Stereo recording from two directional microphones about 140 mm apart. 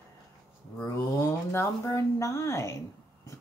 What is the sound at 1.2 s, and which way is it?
Speech, 20° left (ahead or behind).